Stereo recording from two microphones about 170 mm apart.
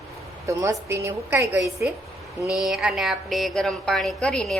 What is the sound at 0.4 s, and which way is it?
A woman's voice, 15° right (ahead or behind).